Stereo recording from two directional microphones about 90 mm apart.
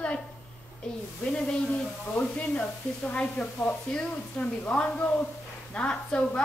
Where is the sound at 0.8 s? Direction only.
10° left (ahead or behind).